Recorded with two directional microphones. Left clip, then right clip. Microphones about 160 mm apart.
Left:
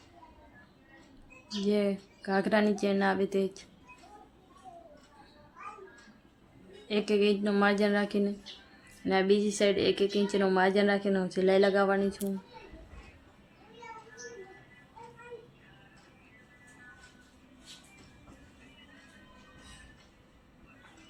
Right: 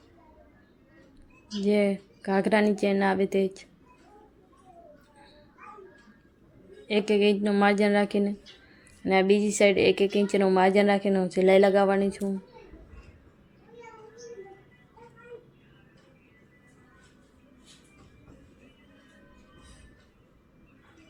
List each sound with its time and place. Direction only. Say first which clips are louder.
1.6 s a woman's voice: right 5 dB; 25° right (ahead or behind)
6.8 s a woman's voice: right 4 dB; 25° right (ahead or behind)